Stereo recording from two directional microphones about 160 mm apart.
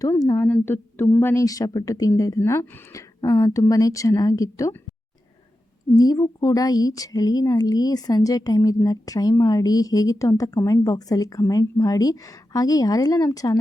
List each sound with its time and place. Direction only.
0.0 s speech: 20° left (ahead or behind)
0.3 s speech: 10° left (ahead or behind)
6.0 s speech: 20° left (ahead or behind)